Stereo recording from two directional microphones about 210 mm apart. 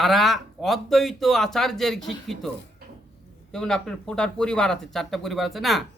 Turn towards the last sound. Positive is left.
turn(degrees=0)  # may be behind; listen again after turning